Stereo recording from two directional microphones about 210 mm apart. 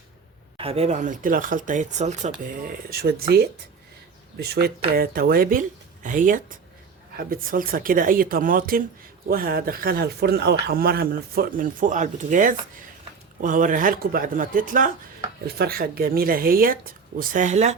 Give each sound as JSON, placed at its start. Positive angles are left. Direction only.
{"t": 0.5, "sound": "speech", "side_deg": -25}